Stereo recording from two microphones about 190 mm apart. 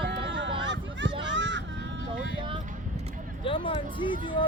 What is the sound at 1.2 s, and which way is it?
Children playing, 70° right (ahead or behind).